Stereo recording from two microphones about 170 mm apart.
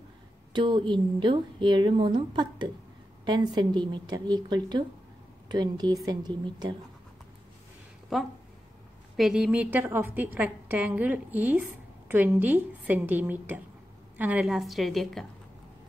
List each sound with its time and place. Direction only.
0.5 s a woman's voice: 25° right (ahead or behind)
8.1 s a woman's voice: centre (ahead or behind)